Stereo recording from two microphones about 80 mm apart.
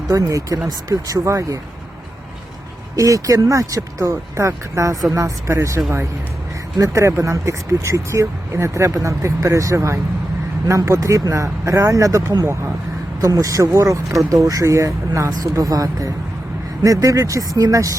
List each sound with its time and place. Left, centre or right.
0.1 s speech: right
2.9 s speech: right
13.2 s speech: right